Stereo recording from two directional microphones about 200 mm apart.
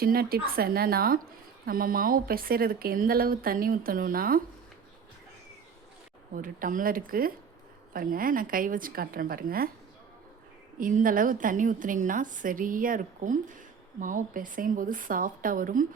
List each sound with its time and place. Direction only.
0.0 s speech: 50° right (ahead or behind)
6.3 s speech: 45° right (ahead or behind)
10.8 s a woman's voice: 45° right (ahead or behind)